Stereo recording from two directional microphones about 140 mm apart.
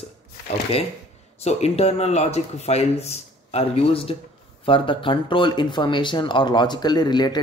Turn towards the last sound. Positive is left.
turn(degrees=30)  # may be behind; listen again after turning